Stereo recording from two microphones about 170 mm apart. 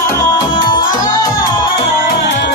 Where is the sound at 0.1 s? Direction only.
25° left (ahead or behind).